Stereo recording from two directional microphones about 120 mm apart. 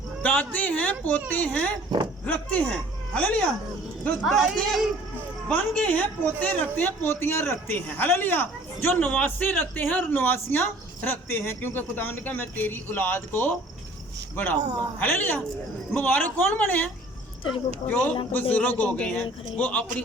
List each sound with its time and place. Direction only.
0.2 s speech: 15° left (ahead or behind)
4.2 s speech: centre (ahead or behind); by 19.8 s 15° left (ahead or behind)